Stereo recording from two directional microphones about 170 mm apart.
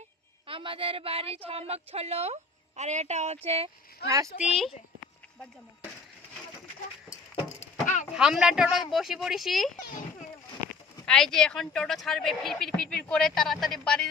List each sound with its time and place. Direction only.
0.4 s a woman's voice: 30° right (ahead or behind)
4.3 s speech: 60° left (ahead or behind)
7.6 s a sound: 45° left (ahead or behind)
8.1 s speech: 5° right (ahead or behind)
11.0 s speech: 5° left (ahead or behind)